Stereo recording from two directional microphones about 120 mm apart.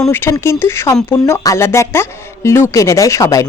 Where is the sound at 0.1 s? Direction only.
20° left (ahead or behind).